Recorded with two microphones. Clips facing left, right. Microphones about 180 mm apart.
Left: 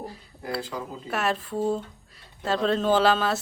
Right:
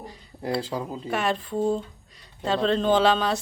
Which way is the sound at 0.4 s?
30° right (ahead or behind).